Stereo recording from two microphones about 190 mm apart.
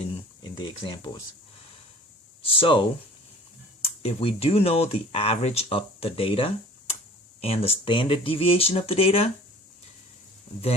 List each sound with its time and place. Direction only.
0.1 s a sound: 25° left (ahead or behind)
2.4 s speech: 30° left (ahead or behind)
4.0 s speech: 30° left (ahead or behind)